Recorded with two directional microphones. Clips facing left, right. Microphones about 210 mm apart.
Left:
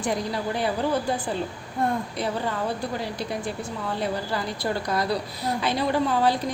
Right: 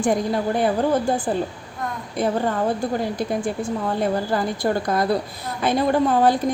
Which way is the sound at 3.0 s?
50° right (ahead or behind).